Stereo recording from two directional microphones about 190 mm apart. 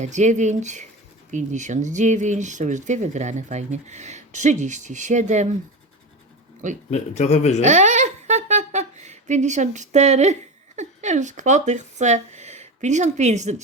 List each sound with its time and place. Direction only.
0.0 s speech: 40° right (ahead or behind)
6.9 s speech: 35° left (ahead or behind)
7.6 s a sound: 40° right (ahead or behind)
10.8 s speech: 40° right (ahead or behind)